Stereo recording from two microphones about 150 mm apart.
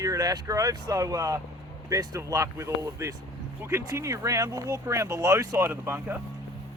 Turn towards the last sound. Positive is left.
turn(degrees=-15)  # may be behind; listen again after turning